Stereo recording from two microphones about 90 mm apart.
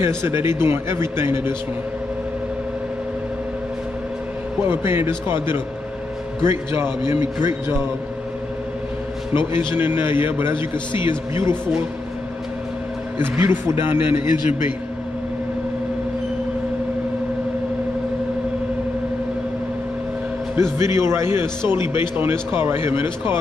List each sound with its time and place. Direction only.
0.0 s a man's voice: 30° right (ahead or behind)
4.6 s a man's voice: 25° right (ahead or behind)
9.8 s a man's voice: 25° right (ahead or behind)
10.5 s a man's voice: 65° left (ahead or behind)
13.2 s a man's voice: 25° right (ahead or behind)
20.7 s a man's voice: 30° right (ahead or behind)